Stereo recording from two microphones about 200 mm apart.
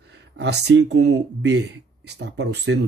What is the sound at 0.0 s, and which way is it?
Speech, 55° right (ahead or behind).